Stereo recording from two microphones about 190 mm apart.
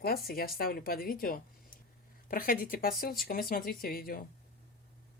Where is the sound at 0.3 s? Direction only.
50° left (ahead or behind).